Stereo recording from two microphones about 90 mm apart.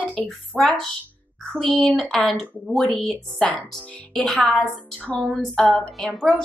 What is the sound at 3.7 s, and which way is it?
A woman's voice, 5° left (ahead or behind).